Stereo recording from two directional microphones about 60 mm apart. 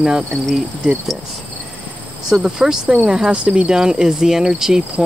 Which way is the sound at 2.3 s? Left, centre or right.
Centre.